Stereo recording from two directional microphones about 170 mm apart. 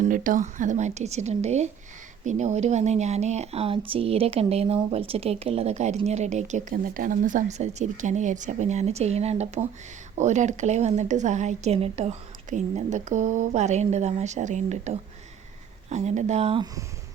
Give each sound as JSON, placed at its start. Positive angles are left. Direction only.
{"t": 0.0, "sound": "speech", "side_deg": -50}